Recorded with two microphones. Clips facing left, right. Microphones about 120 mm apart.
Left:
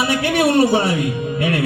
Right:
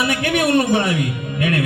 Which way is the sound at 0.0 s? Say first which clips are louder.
Left 2 dB; 30° left (ahead or behind).